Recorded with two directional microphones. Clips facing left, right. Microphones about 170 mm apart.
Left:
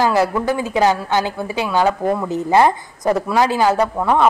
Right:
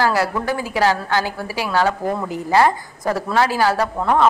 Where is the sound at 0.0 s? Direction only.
20° left (ahead or behind).